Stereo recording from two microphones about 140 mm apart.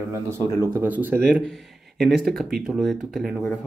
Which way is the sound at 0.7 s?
15° right (ahead or behind).